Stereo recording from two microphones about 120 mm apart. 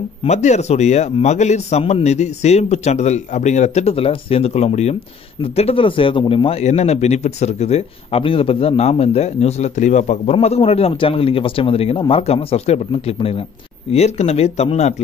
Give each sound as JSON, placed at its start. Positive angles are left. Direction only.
{"t": 0.2, "sound": "a man's voice", "side_deg": 70}
{"t": 6.6, "sound": "speech", "side_deg": 65}
{"t": 10.3, "sound": "a man's voice", "side_deg": 55}
{"t": 13.9, "sound": "speech", "side_deg": 60}